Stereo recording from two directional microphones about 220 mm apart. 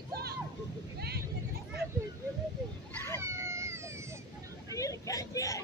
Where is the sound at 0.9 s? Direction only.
45° right (ahead or behind).